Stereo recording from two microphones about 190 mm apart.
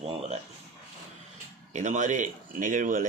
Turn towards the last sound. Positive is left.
turn(degrees=-45)  # may be behind; listen again after turning